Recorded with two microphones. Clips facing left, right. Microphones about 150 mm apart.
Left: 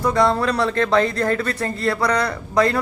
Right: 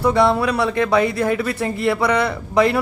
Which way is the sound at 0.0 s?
10° right (ahead or behind).